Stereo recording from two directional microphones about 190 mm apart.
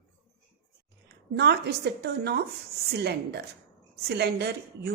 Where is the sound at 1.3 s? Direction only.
60° right (ahead or behind).